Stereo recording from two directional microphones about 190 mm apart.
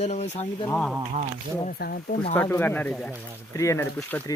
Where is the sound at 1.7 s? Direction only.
55° left (ahead or behind).